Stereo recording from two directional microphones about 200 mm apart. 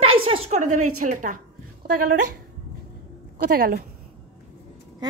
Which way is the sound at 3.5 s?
45° right (ahead or behind).